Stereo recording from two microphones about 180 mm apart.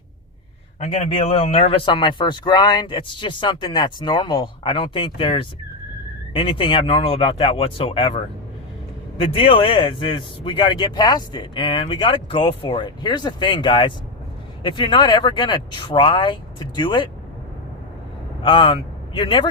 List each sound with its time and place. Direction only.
0.8 s a man's voice: 35° left (ahead or behind)
18.4 s speech: 25° left (ahead or behind)